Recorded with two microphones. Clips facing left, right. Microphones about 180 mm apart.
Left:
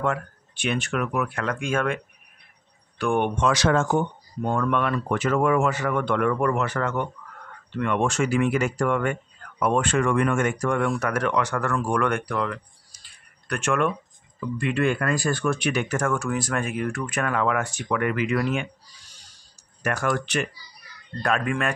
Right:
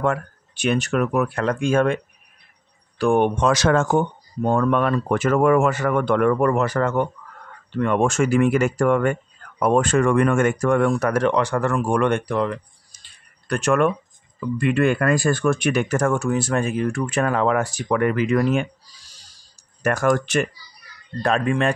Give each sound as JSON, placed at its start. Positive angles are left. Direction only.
{"t": 0.0, "sound": "speech", "side_deg": -45}
{"t": 3.0, "sound": "speech", "side_deg": -35}
{"t": 4.4, "sound": "speech", "side_deg": -40}
{"t": 11.7, "sound": "a sound", "side_deg": -25}
{"t": 13.6, "sound": "speech", "side_deg": -40}
{"t": 16.1, "sound": "speech", "side_deg": -25}
{"t": 21.2, "sound": "speech", "side_deg": -30}